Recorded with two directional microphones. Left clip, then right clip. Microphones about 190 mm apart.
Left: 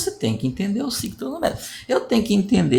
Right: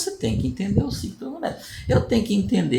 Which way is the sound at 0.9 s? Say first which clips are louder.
Left 5 dB; 30° left (ahead or behind).